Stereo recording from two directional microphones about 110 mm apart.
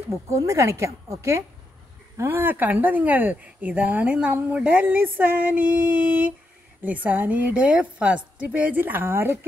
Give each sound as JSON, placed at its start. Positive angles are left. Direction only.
{"t": 0.3, "sound": "a woman's voice", "side_deg": -30}